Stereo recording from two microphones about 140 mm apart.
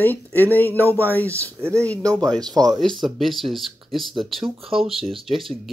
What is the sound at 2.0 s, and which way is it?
Speech, 25° right (ahead or behind).